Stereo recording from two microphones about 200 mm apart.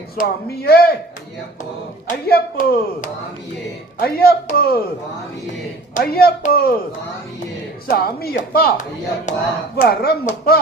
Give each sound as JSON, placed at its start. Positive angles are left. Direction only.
{"t": 0.2, "sound": "speech", "side_deg": 50}
{"t": 2.0, "sound": "speech", "side_deg": 45}
{"t": 6.0, "sound": "speech", "side_deg": 50}
{"t": 7.9, "sound": "speech", "side_deg": 50}